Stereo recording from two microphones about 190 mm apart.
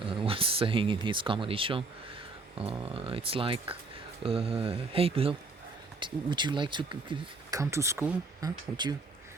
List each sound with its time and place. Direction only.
0.0 s speech: 30° right (ahead or behind)